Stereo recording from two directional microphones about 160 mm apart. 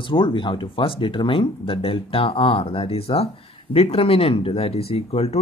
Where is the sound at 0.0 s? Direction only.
30° left (ahead or behind).